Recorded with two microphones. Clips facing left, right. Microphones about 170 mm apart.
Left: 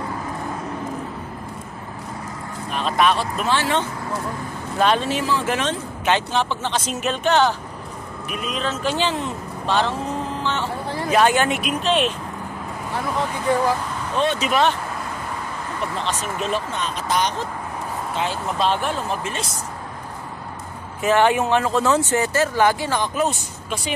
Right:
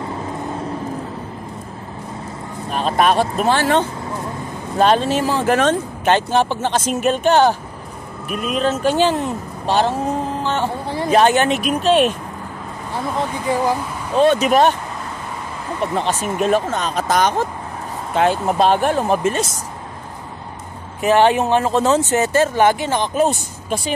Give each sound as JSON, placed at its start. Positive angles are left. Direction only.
{"t": 2.7, "sound": "speech", "side_deg": -40}
{"t": 8.3, "sound": "speech", "side_deg": 0}
{"t": 8.5, "sound": "speech", "side_deg": -45}
{"t": 11.1, "sound": "speech", "side_deg": -25}
{"t": 11.6, "sound": "speech", "side_deg": -40}
{"t": 14.1, "sound": "speech", "side_deg": -45}
{"t": 16.0, "sound": "speech", "side_deg": -50}
{"t": 21.0, "sound": "speech", "side_deg": -20}